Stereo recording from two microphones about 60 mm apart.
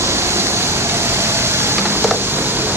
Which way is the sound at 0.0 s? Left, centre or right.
Right.